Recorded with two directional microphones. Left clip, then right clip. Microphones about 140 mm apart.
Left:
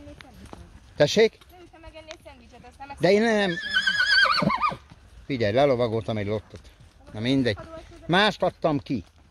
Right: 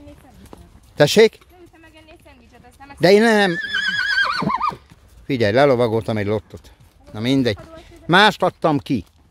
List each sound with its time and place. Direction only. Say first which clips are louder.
0.5 s clip-clop: right 2 dB; 20° left (ahead or behind)
0.9 s speech: right 7 dB; 85° right
1.8 s a sound: left 3 dB; 5° right (ahead or behind)
3.0 s speech: right 7 dB; 75° right (ahead or behind)
3.6 s neigh: right 2 dB; 40° left (ahead or behind)
5.2 s speech: right 6 dB; 80° right
7.2 s speech: right 5 dB; 50° right (ahead or behind)
8.1 s speech: right 8 dB; 65° right (ahead or behind); by 9.0 s 80° right